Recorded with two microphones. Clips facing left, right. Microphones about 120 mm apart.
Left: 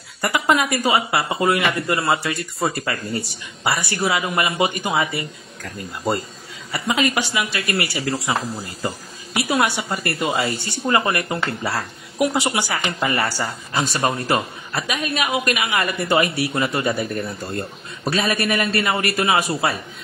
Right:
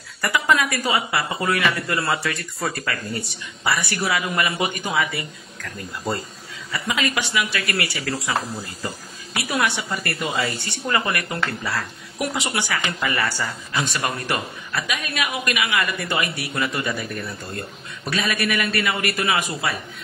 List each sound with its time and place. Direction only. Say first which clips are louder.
0.2 s speech: left 2 dB; 25° left (ahead or behind)
6.7 s speech: left 4 dB; 30° left (ahead or behind)
9.5 s a woman's voice: left 3 dB; 30° left (ahead or behind)